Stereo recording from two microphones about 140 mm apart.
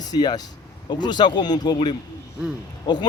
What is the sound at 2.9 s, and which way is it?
Speech, 30° left (ahead or behind).